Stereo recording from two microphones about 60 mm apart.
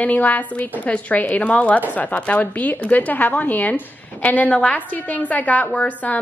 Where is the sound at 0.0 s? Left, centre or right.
Left.